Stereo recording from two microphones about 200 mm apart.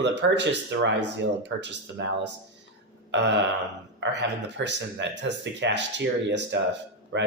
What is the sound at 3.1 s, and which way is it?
Speech, 60° right (ahead or behind).